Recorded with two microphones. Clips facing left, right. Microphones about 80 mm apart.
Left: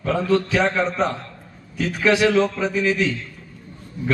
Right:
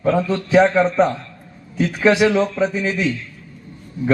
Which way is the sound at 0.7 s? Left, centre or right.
Right.